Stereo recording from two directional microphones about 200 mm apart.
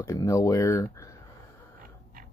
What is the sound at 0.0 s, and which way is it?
Speech, 15° left (ahead or behind).